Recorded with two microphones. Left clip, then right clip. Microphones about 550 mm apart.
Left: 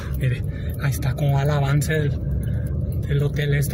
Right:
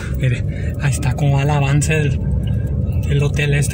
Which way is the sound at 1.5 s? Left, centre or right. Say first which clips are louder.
Right 5 dB; left.